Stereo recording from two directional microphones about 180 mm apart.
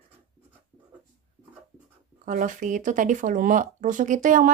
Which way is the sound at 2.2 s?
45° right (ahead or behind).